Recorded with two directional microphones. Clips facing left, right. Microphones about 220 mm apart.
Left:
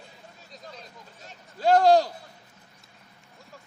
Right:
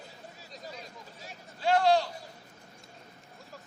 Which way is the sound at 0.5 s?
10° right (ahead or behind).